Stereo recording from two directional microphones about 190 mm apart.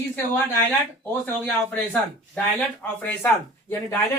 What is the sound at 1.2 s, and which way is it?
A man's voice, 10° left (ahead or behind).